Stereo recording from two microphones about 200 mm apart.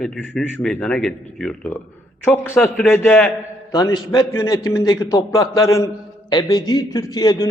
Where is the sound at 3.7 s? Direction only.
20° left (ahead or behind).